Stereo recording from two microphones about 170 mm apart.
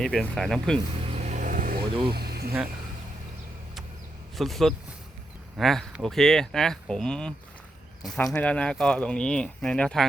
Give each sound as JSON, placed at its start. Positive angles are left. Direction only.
{"t": 0.0, "sound": "speech", "side_deg": 0}
{"t": 1.0, "sound": "vehicle", "side_deg": -40}
{"t": 2.1, "sound": "a sound", "side_deg": -65}
{"t": 4.4, "sound": "speech", "side_deg": 0}